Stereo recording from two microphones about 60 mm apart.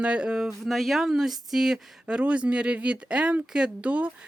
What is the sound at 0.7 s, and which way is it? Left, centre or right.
Speech, centre.